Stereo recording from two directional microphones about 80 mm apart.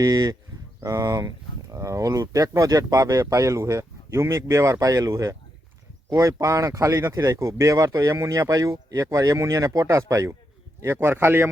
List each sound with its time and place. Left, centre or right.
0.0 s speech: right
0.8 s speech: right
10.9 s a man's voice: right